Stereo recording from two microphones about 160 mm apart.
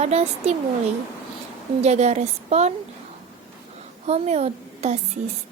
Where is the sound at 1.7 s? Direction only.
45° right (ahead or behind).